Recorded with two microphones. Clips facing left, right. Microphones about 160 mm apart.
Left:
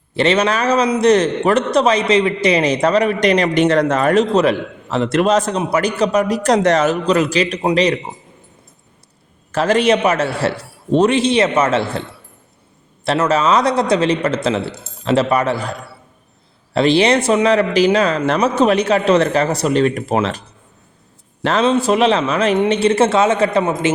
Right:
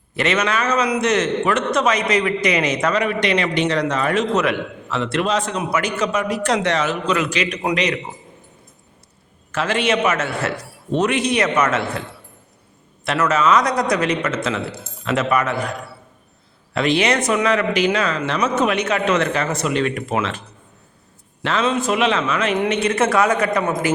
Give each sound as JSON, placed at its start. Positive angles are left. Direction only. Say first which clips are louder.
{"t": 0.2, "sound": "a man's voice", "louder": "left 5 dB", "side_deg": 30}
{"t": 9.5, "sound": "a man's voice", "louder": "left 6 dB", "side_deg": 40}
{"t": 13.1, "sound": "a man's voice", "louder": "left 2 dB", "side_deg": 30}
{"t": 16.7, "sound": "a man's voice", "louder": "left 5 dB", "side_deg": 30}
{"t": 21.4, "sound": "a man's voice", "louder": "left 5 dB", "side_deg": 35}